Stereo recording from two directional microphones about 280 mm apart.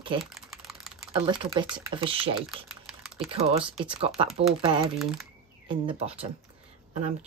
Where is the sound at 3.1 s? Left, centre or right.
Right.